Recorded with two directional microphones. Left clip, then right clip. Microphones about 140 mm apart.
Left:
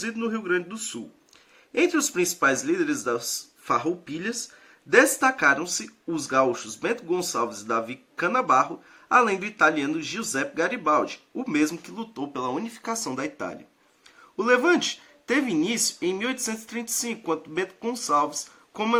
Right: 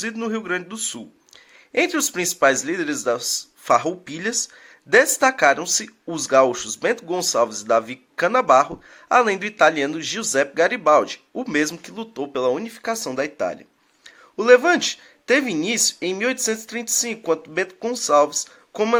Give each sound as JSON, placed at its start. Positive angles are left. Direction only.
{"t": 0.0, "sound": "speech", "side_deg": -40}
{"t": 3.8, "sound": "speech", "side_deg": -55}